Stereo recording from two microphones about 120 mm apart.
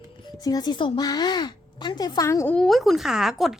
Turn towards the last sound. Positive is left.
turn(degrees=0)  # may be behind; listen again after turning